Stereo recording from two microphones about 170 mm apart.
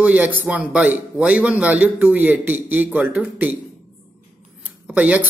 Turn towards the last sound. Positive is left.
turn(degrees=-10)  # may be behind; listen again after turning